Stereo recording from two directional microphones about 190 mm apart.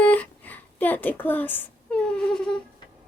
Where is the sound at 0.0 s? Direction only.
10° left (ahead or behind).